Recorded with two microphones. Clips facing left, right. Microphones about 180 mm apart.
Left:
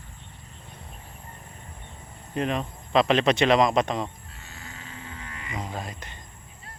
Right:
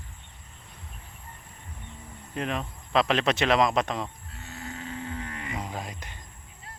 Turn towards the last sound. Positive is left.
turn(degrees=-10)  # may be behind; listen again after turning